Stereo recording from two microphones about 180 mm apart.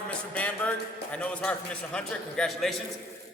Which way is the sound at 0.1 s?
10° left (ahead or behind).